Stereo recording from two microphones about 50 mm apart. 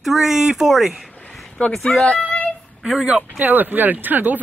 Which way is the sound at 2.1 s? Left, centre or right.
Left.